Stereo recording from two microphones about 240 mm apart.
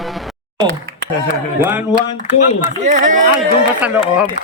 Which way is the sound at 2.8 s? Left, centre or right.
Right.